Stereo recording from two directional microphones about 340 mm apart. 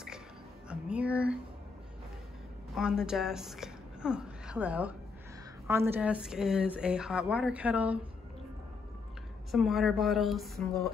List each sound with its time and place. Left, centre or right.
0.7 s a sound: centre
2.7 s a woman's voice: centre
9.5 s a woman's voice: centre